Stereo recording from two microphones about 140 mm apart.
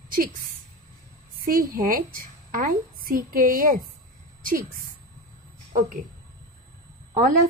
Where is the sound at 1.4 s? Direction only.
85° right.